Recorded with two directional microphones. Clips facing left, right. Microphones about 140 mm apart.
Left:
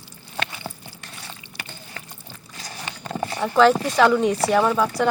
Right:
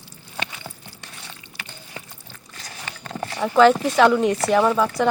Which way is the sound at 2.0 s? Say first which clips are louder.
Right 4 dB; 20° right (ahead or behind).